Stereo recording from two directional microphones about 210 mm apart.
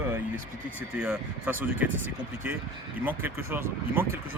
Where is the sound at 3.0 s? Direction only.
10° right (ahead or behind).